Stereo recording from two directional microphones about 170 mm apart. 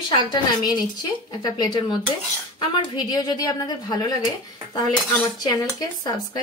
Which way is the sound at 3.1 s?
20° left (ahead or behind).